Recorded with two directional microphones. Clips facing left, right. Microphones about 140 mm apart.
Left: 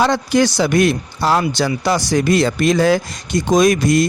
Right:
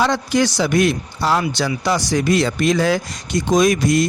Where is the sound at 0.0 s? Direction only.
45° left (ahead or behind).